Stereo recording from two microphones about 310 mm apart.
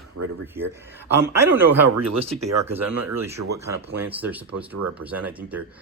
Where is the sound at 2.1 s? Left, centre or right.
Centre.